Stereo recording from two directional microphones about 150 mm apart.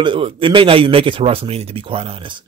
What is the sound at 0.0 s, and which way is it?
Speech, 35° right (ahead or behind).